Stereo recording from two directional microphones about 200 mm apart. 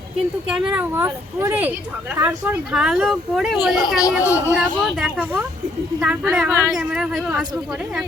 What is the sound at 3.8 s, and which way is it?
Speech, 15° left (ahead or behind).